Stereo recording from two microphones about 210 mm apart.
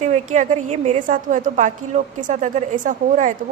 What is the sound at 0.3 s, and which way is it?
A woman's voice, 35° right (ahead or behind).